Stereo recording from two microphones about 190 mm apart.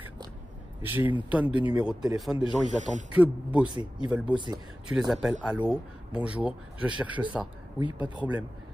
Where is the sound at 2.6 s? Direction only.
40° right (ahead or behind).